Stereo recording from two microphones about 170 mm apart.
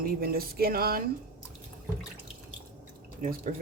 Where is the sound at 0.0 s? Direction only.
60° right (ahead or behind).